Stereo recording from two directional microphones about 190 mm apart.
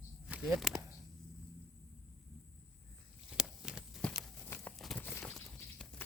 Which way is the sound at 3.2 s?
5° right (ahead or behind).